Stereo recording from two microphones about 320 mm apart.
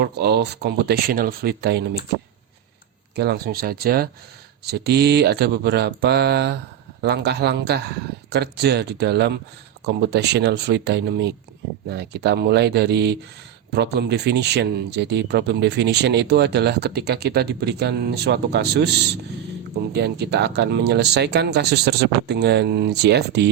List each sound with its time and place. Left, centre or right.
0.0 s speech: right
3.2 s speech: right